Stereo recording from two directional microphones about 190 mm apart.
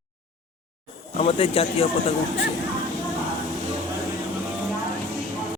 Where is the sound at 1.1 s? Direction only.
30° left (ahead or behind).